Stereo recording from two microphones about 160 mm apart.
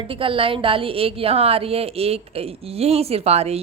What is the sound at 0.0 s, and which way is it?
A woman's voice, 35° right (ahead or behind).